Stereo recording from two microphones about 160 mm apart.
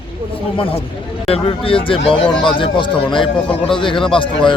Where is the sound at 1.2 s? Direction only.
35° left (ahead or behind).